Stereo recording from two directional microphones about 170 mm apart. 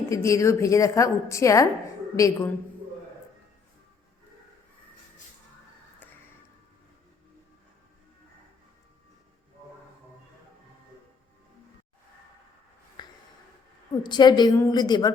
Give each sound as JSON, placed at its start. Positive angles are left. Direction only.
{"t": 0.1, "sound": "a woman's voice", "side_deg": 20}
{"t": 13.0, "sound": "a sound", "side_deg": 25}
{"t": 14.0, "sound": "a woman's voice", "side_deg": 25}